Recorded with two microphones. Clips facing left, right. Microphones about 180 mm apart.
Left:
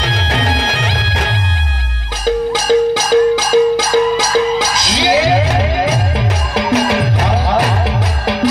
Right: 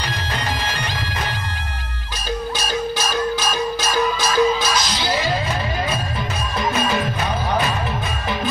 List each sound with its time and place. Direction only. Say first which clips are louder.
0.0 s bagpipes: left 7 dB; 90° left
2.2 s music: left 11 dB; 90° left